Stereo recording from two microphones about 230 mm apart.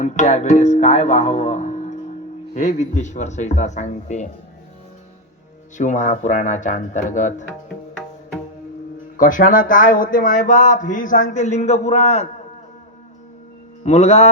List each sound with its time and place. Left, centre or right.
0.0 s speech: left
5.7 s speech: left
9.1 s speech: left
13.8 s mantra: left